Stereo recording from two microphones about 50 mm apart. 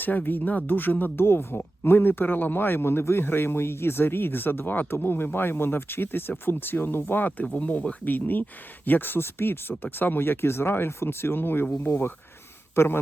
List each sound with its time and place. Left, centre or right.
0.0 s speech: left
1.1 s a man's voice: left
12.7 s speech: left